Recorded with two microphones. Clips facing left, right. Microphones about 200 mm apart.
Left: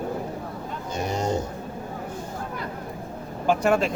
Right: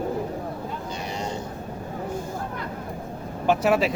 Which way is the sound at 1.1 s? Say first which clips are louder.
Left 7 dB; 45° left (ahead or behind).